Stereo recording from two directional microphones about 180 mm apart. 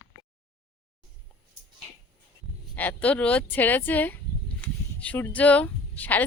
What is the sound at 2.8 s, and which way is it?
Speech, 10° left (ahead or behind).